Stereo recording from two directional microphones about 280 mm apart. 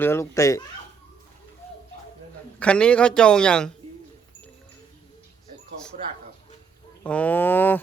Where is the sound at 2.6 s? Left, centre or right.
Centre.